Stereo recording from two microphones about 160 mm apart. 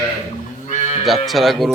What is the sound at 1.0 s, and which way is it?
Speech, centre (ahead or behind).